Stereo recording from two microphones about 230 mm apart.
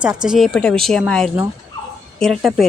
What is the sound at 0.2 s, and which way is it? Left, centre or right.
A woman's voice, centre.